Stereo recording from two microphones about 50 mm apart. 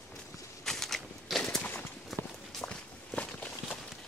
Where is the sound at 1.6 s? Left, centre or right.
Left.